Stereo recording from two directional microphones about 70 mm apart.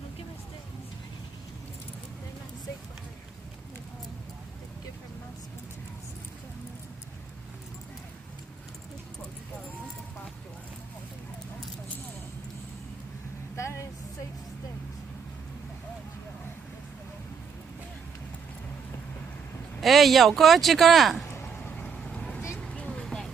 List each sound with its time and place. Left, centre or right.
13.6 s a sound: left
19.8 s speech: centre
21.5 s vehicle: centre